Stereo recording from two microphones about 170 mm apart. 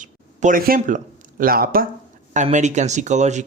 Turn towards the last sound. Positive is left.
turn(degrees=-45)  # may be behind; listen again after turning